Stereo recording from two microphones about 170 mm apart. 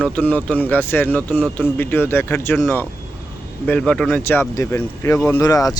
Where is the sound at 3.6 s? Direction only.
5° left (ahead or behind).